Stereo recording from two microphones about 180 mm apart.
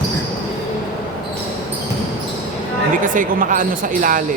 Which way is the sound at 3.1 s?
50° right (ahead or behind).